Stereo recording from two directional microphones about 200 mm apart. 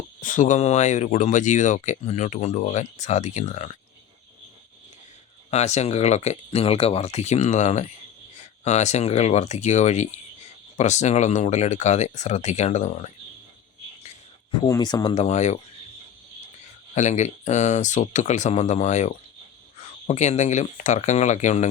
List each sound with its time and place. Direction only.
0.2 s speech: 40° left (ahead or behind)
5.5 s speech: 35° left (ahead or behind)
14.6 s speech: 20° left (ahead or behind)
15.1 s speech: 35° left (ahead or behind)
16.9 s speech: 35° left (ahead or behind)